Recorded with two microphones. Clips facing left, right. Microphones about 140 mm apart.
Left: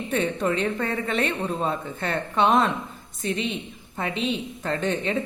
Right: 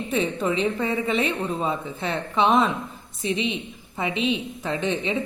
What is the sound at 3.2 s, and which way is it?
A woman's voice, 40° left (ahead or behind).